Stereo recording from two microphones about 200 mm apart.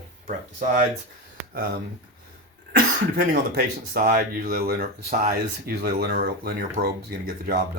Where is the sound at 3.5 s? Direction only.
50° right (ahead or behind).